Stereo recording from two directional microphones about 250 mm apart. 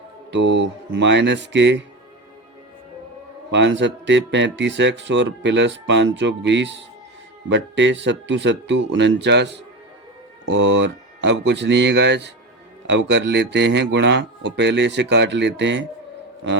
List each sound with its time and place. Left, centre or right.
0.3 s speech: right
3.5 s speech: right